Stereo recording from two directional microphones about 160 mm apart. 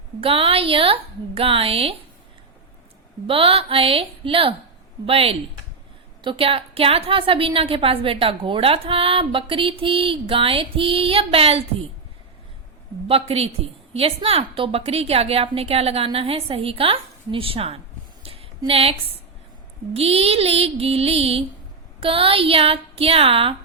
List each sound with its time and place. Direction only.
0.2 s a woman's voice: 35° right (ahead or behind)
3.2 s a woman's voice: 35° right (ahead or behind)
13.1 s a woman's voice: 40° right (ahead or behind)
18.2 s a sound: 35° right (ahead or behind)
19.9 s a woman's voice: 40° right (ahead or behind)